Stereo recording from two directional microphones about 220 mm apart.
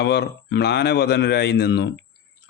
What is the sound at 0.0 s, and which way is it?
Speech, 50° left (ahead or behind).